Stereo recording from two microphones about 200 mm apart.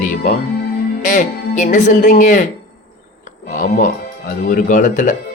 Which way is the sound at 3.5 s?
40° left (ahead or behind).